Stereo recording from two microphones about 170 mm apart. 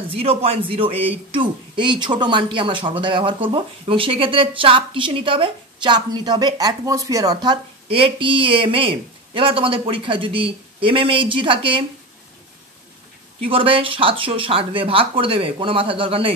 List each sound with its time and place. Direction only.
0.1 s speech: 35° right (ahead or behind)
7.9 s speech: 30° right (ahead or behind)
13.4 s speech: 30° right (ahead or behind)